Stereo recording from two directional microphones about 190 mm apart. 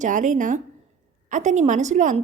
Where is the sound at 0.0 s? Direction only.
40° right (ahead or behind).